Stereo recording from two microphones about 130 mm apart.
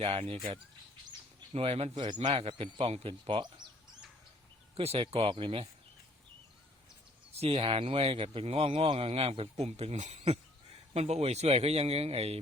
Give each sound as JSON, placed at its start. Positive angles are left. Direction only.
{"t": 0.0, "sound": "speech", "side_deg": -50}
{"t": 1.5, "sound": "speech", "side_deg": -50}
{"t": 2.5, "sound": "speech", "side_deg": -45}
{"t": 4.8, "sound": "speech", "side_deg": -50}
{"t": 7.3, "sound": "speech", "side_deg": -50}